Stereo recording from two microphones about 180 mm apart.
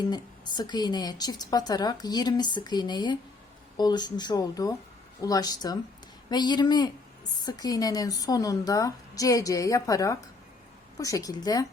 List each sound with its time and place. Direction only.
0.0 s a woman's voice: 25° left (ahead or behind)